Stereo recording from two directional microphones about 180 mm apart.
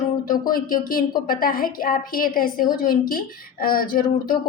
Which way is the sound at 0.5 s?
50° left (ahead or behind).